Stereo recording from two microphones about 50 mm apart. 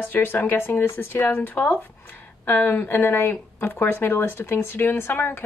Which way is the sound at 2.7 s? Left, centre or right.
Left.